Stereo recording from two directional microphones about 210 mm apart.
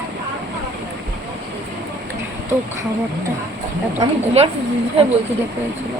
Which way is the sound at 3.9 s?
30° right (ahead or behind).